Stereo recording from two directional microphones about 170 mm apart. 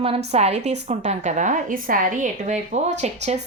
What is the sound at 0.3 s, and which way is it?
A woman's voice, 40° right (ahead or behind).